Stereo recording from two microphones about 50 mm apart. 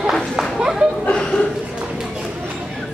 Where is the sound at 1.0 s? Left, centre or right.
Centre.